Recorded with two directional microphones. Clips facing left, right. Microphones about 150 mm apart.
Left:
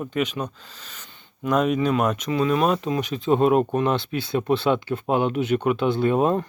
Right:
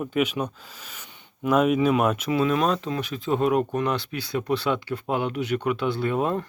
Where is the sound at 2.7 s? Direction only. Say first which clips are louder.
Left 3 dB; 15° left (ahead or behind).